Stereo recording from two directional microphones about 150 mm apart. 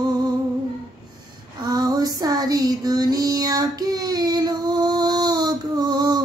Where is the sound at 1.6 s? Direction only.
25° right (ahead or behind).